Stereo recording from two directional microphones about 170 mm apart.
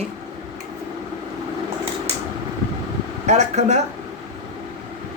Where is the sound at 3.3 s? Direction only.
45° right (ahead or behind).